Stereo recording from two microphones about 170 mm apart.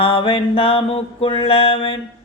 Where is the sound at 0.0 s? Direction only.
30° left (ahead or behind).